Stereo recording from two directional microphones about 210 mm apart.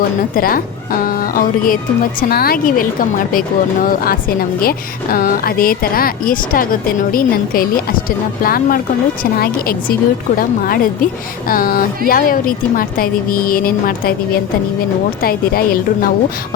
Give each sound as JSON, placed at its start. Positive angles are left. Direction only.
{"t": 0.3, "sound": "a woman's voice", "side_deg": 45}
{"t": 10.3, "sound": "a woman's voice", "side_deg": 45}